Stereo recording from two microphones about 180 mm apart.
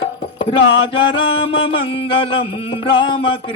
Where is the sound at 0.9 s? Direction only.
30° left (ahead or behind).